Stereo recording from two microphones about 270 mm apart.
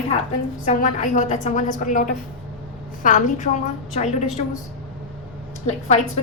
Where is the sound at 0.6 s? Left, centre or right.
Left.